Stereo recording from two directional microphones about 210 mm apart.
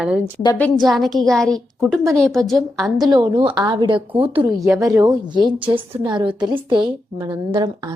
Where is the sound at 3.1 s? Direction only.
20° right (ahead or behind).